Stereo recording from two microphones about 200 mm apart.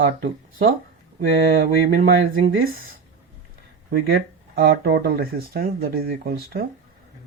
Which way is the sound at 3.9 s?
50° right (ahead or behind).